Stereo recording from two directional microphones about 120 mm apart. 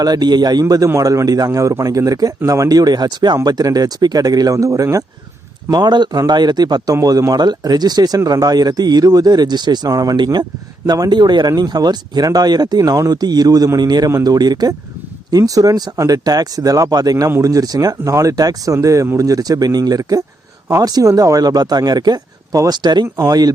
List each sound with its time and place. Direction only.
0.0 s a man's voice: 35° right (ahead or behind)
5.7 s a man's voice: 35° right (ahead or behind)